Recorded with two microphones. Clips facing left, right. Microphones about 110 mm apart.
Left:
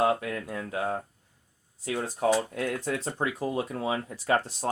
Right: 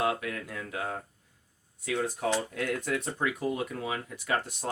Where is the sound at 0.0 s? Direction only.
30° left (ahead or behind).